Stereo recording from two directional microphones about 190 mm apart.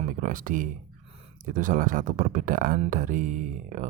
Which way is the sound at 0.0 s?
45° right (ahead or behind).